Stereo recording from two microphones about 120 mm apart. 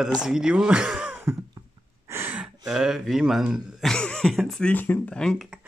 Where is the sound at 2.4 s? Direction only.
5° right (ahead or behind).